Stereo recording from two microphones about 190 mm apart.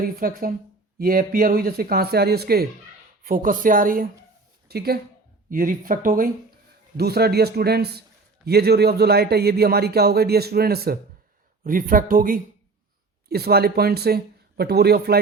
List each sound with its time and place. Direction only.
0.0 s speech: 50° right (ahead or behind)